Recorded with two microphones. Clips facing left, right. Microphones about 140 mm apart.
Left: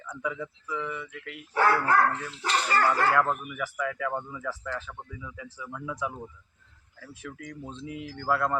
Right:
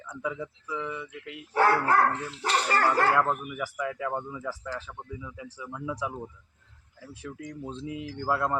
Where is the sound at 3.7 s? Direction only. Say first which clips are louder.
Left 1 dB; 20° right (ahead or behind).